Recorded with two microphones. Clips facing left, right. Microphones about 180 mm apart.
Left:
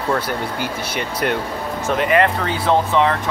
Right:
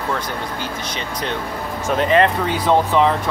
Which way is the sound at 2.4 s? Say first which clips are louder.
Right 1 dB; 15° right (ahead or behind).